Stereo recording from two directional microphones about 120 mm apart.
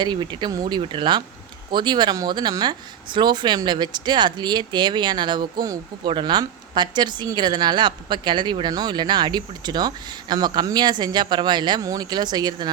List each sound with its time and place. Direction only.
0.0 s speech: 40° right (ahead or behind)